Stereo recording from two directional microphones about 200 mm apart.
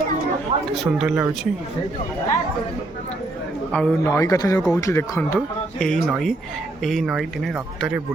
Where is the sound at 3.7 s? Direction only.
15° left (ahead or behind); by 8.0 s centre (ahead or behind).